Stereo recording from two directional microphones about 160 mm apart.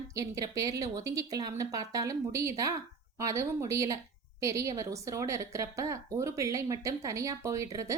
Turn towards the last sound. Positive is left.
turn(degrees=-20)  # may be behind; listen again after turning